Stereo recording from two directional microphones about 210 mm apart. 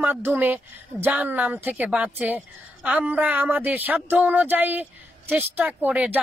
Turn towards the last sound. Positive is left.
turn(degrees=-5)  # may be behind; listen again after turning